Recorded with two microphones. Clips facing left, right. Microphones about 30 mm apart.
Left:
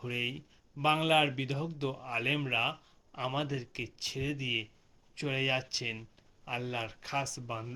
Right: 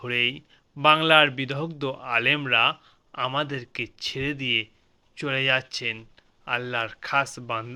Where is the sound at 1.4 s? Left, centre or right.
Right.